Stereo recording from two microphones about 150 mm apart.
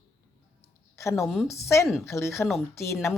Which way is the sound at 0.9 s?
20° left (ahead or behind).